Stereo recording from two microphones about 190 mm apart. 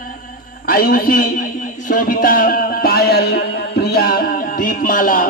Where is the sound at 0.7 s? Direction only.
50° left (ahead or behind).